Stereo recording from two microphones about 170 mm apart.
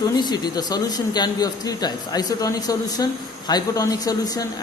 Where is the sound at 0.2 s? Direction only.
25° left (ahead or behind).